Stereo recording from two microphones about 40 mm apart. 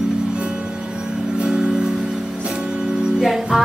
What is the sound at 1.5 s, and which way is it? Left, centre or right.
Music, centre.